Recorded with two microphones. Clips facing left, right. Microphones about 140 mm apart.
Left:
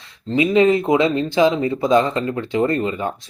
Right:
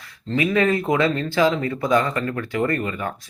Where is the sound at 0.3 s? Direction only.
20° left (ahead or behind).